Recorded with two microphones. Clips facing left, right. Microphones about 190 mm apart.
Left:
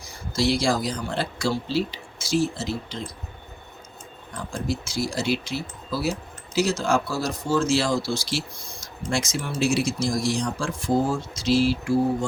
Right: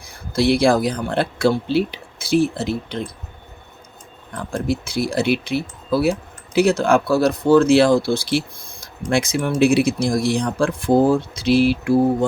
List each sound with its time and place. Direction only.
0.3 s speech: 60° right (ahead or behind)
4.3 s speech: 60° right (ahead or behind)